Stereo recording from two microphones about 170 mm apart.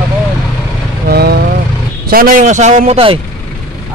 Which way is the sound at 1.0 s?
70° right (ahead or behind).